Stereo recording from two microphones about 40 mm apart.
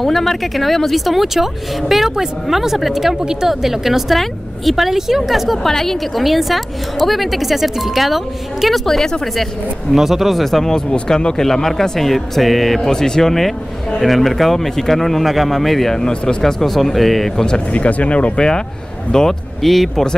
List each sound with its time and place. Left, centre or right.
0.0 s speech: centre
5.7 s speech: centre
9.9 s speech: centre
10.9 s speech: left; by 12.9 s centre
12.9 s speech: centre
17.6 s speech: left; by 19.3 s centre
19.6 s speech: centre